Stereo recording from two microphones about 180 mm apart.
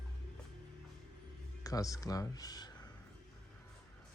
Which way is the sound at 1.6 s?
20° left (ahead or behind).